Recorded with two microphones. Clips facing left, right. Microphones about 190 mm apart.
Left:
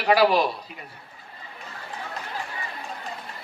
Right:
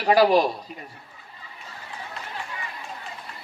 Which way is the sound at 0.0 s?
45° right (ahead or behind).